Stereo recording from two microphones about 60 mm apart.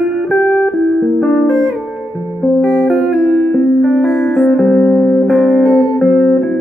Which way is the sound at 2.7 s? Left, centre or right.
Left.